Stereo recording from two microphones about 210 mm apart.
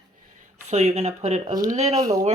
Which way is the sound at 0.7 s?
30° right (ahead or behind).